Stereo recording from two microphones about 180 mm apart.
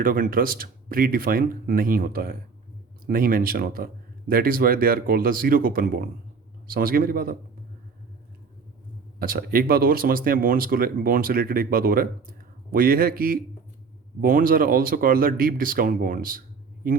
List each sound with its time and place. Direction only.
0.0 s speech: 50° right (ahead or behind)
9.1 s speech: 55° right (ahead or behind)